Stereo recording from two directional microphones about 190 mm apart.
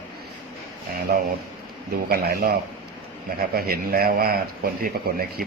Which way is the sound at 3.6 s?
50° right (ahead or behind).